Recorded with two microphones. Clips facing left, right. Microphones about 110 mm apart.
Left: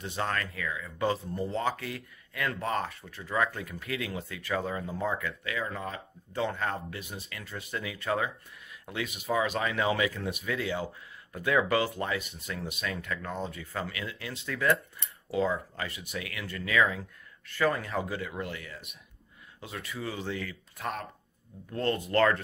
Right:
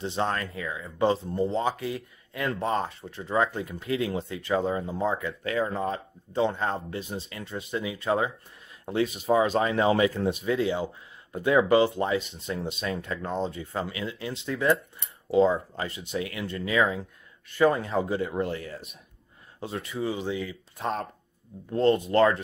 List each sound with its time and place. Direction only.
0.0 s speech: 25° right (ahead or behind)
5.4 s speech: 35° right (ahead or behind)